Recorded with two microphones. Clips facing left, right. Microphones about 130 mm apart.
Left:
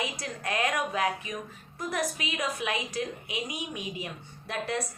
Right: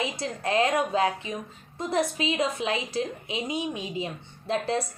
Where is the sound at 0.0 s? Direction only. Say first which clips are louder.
Right 5 dB; 25° right (ahead or behind).